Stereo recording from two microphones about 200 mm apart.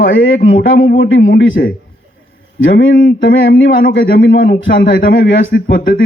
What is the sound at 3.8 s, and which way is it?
Speech, 45° left (ahead or behind).